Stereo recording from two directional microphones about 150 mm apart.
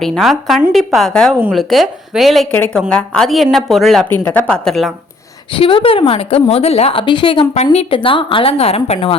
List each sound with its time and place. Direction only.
0.0 s speech: centre (ahead or behind)
2.5 s speech: 10° left (ahead or behind)
4.1 s speech: 15° left (ahead or behind)
5.5 s a woman's voice: 35° left (ahead or behind)